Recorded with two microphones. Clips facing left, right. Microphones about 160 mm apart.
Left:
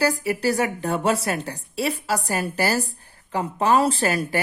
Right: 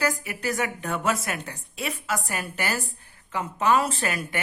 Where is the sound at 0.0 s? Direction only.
35° left (ahead or behind).